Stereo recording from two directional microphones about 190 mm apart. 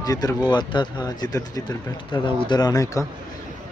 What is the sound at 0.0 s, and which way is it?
Speech, 20° left (ahead or behind).